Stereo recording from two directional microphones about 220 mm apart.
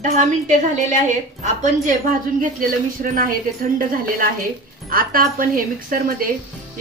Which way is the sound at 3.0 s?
40° right (ahead or behind).